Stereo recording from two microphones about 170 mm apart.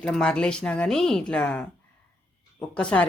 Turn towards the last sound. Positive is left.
turn(degrees=5)  # may be behind; listen again after turning